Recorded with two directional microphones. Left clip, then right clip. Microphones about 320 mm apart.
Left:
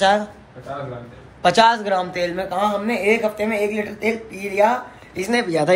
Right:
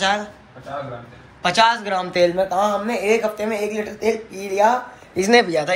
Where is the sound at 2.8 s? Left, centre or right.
Centre.